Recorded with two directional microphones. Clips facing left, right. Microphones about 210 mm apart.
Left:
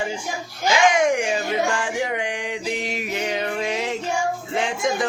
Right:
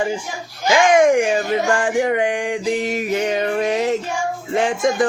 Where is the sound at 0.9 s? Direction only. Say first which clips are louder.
Right 7 dB; 50° right (ahead or behind).